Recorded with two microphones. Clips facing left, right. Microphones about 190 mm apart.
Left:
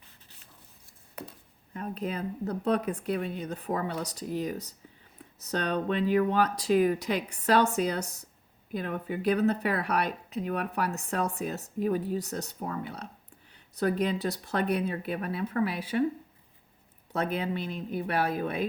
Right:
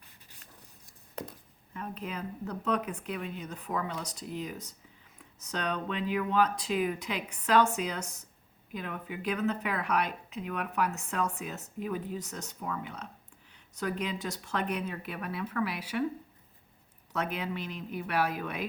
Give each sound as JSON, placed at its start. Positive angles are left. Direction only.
{"t": 1.7, "sound": "speech", "side_deg": 35}
{"t": 17.1, "sound": "speech", "side_deg": 30}